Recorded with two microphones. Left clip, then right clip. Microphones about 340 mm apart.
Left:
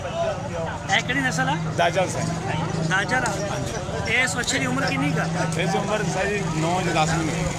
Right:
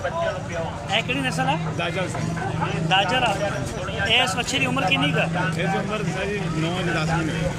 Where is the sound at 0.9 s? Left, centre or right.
Centre.